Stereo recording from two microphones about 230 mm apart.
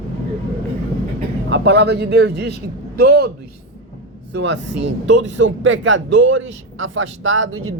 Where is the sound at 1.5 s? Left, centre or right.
Right.